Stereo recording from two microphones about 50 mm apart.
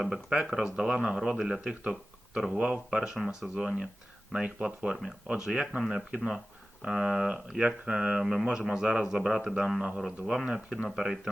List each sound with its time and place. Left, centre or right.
0.0 s speech: centre
4.4 s speech: centre
10.0 s speech: centre